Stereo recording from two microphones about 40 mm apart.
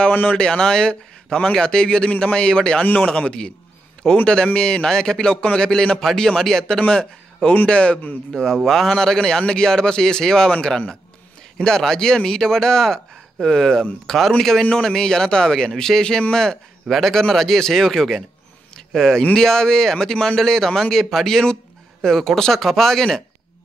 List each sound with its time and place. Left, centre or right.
0.1 s speech: left
0.4 s a man's voice: centre
7.6 s a man's voice: left
8.3 s a man's voice: centre
14.8 s a man's voice: centre
16.8 s a man's voice: centre